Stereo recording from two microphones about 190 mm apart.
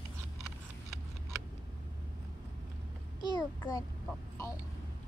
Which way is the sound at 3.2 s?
25° left (ahead or behind).